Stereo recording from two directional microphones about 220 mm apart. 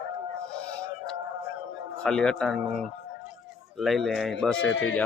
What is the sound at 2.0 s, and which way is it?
A man's voice, 5° left (ahead or behind).